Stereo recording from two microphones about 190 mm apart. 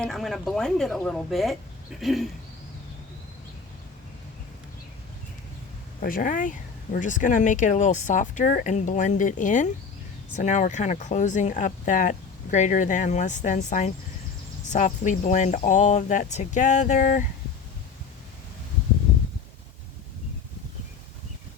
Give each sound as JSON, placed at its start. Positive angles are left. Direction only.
{"t": 0.0, "sound": "a woman's voice", "side_deg": 0}
{"t": 6.0, "sound": "speech", "side_deg": 45}